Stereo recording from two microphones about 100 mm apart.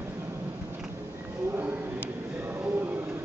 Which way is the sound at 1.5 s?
25° right (ahead or behind).